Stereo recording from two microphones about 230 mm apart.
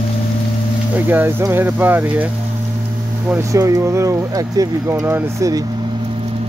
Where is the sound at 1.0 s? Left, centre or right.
Centre.